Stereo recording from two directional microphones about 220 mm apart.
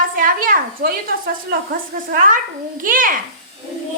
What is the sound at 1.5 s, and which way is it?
A woman's voice, 40° right (ahead or behind).